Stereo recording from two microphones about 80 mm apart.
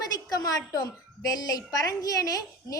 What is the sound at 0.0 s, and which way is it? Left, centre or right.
A woman's voice, left.